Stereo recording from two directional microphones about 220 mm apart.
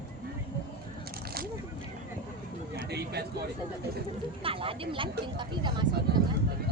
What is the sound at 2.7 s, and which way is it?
Speech, 50° right (ahead or behind).